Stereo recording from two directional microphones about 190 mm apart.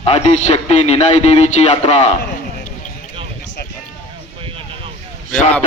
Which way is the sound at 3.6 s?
55° left (ahead or behind).